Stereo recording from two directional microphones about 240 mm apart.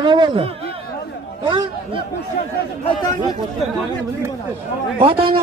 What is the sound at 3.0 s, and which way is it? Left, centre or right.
Speech, centre.